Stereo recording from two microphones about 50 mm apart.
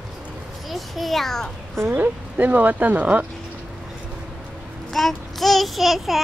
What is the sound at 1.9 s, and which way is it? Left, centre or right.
Child singing, right.